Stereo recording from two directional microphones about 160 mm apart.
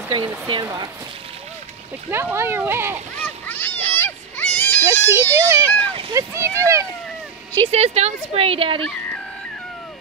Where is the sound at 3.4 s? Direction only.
10° left (ahead or behind).